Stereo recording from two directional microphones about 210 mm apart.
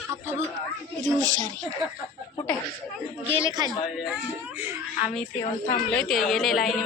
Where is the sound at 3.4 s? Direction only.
20° right (ahead or behind).